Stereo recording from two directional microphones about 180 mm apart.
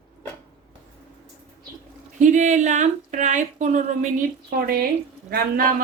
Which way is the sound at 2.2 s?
40° right (ahead or behind).